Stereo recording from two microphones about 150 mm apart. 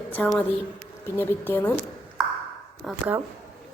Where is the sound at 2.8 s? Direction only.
10° right (ahead or behind).